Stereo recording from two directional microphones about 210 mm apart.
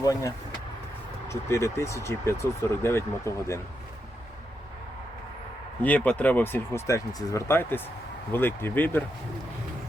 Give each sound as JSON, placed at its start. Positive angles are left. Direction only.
{"t": 0.0, "sound": "speech", "side_deg": 15}
{"t": 5.8, "sound": "speech", "side_deg": 10}